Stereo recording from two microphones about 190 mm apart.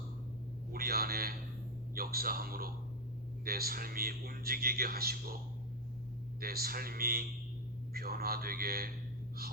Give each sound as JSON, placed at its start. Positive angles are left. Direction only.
{"t": 0.7, "sound": "a sound", "side_deg": -55}
{"t": 2.0, "sound": "speech", "side_deg": -50}
{"t": 6.4, "sound": "speech", "side_deg": -50}